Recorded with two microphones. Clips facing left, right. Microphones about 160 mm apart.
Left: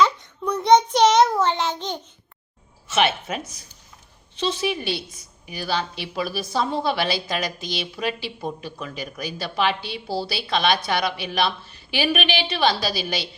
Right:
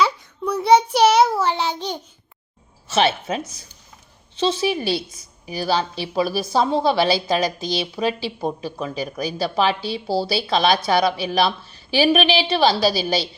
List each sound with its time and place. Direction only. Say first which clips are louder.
0.0 s child singing: even; 5° right (ahead or behind)
2.8 s a woman's voice: right 2 dB; 35° right (ahead or behind)